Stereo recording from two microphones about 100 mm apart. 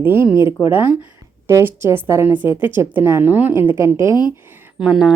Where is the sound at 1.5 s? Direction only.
25° right (ahead or behind).